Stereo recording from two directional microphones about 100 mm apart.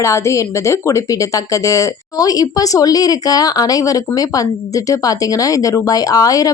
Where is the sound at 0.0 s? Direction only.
30° left (ahead or behind).